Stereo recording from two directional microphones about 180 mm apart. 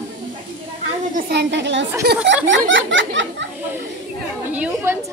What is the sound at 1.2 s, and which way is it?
Speech, 70° right (ahead or behind).